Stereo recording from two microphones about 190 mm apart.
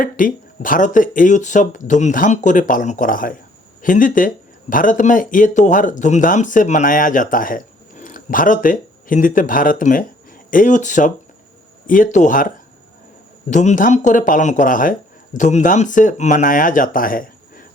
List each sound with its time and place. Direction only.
0.0 s speech: 45° left (ahead or behind)